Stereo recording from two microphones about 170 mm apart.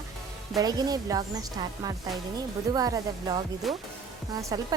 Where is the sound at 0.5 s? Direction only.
20° right (ahead or behind).